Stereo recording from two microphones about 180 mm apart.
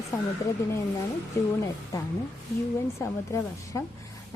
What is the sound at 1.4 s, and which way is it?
Speech, 15° left (ahead or behind).